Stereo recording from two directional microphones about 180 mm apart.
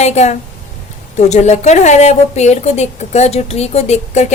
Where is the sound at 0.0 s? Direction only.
40° left (ahead or behind).